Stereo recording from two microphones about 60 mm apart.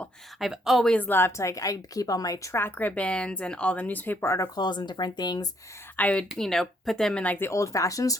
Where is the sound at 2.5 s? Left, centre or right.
Left.